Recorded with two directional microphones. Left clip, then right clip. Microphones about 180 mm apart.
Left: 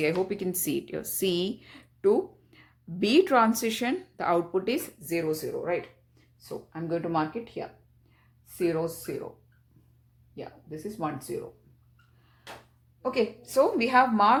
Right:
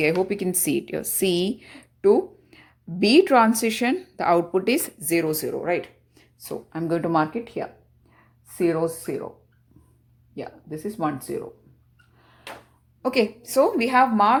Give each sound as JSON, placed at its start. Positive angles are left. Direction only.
{"t": 0.3, "sound": "a woman's voice", "side_deg": -25}
{"t": 5.0, "sound": "speech", "side_deg": -50}
{"t": 10.3, "sound": "speech", "side_deg": -45}
{"t": 13.0, "sound": "a woman's voice", "side_deg": -50}
{"t": 13.4, "sound": "a woman's voice", "side_deg": -30}